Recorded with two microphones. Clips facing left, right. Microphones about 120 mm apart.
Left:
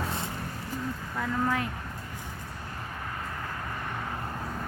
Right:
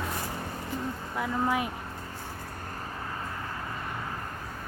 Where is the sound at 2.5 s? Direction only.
45° right (ahead or behind).